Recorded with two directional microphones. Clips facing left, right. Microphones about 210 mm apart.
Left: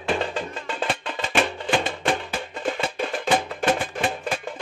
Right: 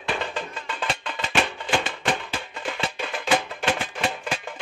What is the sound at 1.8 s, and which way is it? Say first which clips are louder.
Music: left 2 dB; 50° left (ahead or behind).